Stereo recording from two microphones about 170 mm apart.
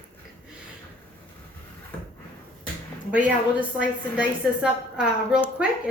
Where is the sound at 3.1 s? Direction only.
10° right (ahead or behind).